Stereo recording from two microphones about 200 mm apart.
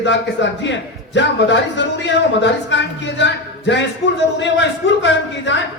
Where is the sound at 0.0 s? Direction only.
65° left (ahead or behind).